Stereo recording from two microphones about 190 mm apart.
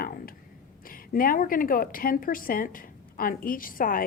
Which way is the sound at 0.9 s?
45° left (ahead or behind).